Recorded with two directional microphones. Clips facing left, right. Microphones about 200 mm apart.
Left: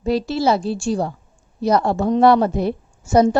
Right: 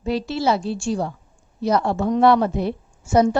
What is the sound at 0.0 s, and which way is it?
A woman's voice, 40° left (ahead or behind).